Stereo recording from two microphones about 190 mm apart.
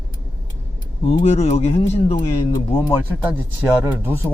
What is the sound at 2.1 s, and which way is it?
Speech, 20° left (ahead or behind).